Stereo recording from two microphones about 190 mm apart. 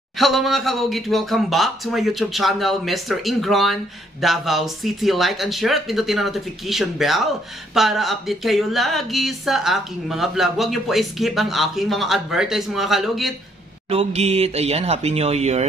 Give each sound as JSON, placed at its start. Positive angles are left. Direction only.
{"t": 0.2, "sound": "speech", "side_deg": 0}
{"t": 13.8, "sound": "speech", "side_deg": -35}